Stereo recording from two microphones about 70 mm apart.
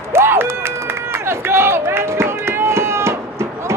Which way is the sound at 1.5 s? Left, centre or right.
Right.